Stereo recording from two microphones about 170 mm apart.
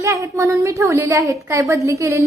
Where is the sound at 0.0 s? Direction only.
20° right (ahead or behind).